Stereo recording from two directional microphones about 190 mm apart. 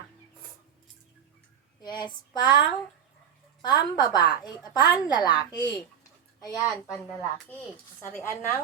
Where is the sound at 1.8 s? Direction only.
25° left (ahead or behind).